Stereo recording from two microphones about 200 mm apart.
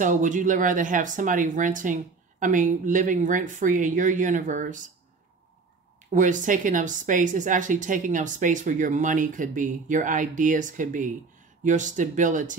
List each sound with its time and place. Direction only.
0.0 s speech: 40° right (ahead or behind)
6.1 s speech: 40° right (ahead or behind)